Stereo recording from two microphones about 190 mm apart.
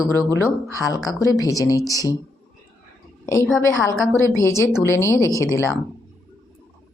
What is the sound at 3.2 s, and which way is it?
A woman's voice, 15° left (ahead or behind).